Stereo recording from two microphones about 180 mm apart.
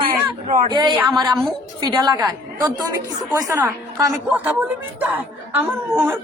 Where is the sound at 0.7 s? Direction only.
25° right (ahead or behind).